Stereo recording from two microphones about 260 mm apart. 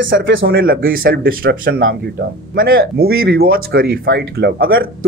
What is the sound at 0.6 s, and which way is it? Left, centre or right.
Speech, right.